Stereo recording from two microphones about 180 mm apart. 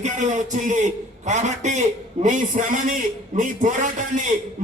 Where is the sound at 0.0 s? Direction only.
40° right (ahead or behind).